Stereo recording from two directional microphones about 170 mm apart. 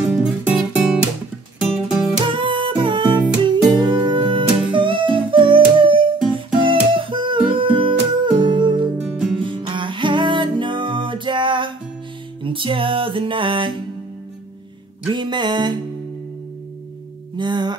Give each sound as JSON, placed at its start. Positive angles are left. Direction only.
{"t": 0.1, "sound": "music", "side_deg": -5}
{"t": 2.2, "sound": "music", "side_deg": -30}
{"t": 9.1, "sound": "music", "side_deg": -5}
{"t": 9.4, "sound": "music", "side_deg": -30}
{"t": 15.0, "sound": "music", "side_deg": -25}
{"t": 17.4, "sound": "music", "side_deg": -25}